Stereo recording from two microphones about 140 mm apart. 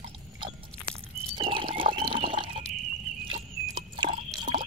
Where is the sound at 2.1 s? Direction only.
35° right (ahead or behind).